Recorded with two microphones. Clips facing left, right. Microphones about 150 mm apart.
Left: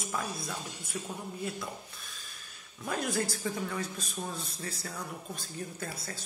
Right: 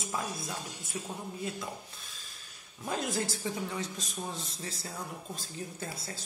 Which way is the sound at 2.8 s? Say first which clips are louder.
Left 1 dB; 25° right (ahead or behind).